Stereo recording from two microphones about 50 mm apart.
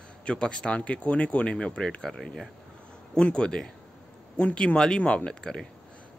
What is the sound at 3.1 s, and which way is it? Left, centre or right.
Speech, centre.